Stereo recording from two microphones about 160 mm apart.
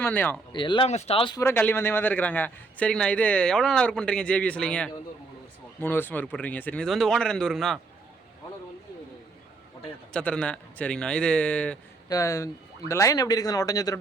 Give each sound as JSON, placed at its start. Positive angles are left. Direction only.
{"t": 0.0, "sound": "a man's voice", "side_deg": 10}
{"t": 0.5, "sound": "speech", "side_deg": 30}
{"t": 0.9, "sound": "speech", "side_deg": 40}
{"t": 1.4, "sound": "a man's voice", "side_deg": 15}
{"t": 10.1, "sound": "a man's voice", "side_deg": 5}
{"t": 12.0, "sound": "speech", "side_deg": 20}